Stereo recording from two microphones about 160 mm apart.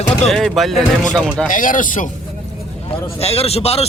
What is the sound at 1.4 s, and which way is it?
Speech, 55° left (ahead or behind).